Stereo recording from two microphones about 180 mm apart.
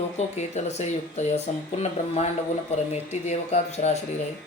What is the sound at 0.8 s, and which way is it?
Speech, 40° left (ahead or behind).